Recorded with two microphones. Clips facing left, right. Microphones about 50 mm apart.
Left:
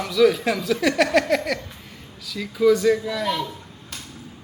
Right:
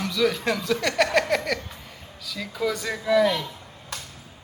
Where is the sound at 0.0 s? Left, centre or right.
Centre.